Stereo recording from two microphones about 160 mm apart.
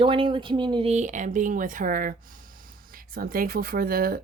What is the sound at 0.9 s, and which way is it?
A woman's voice, 50° right (ahead or behind).